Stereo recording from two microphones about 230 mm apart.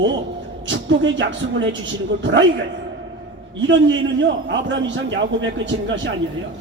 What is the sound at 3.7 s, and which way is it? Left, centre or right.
A man's voice, right.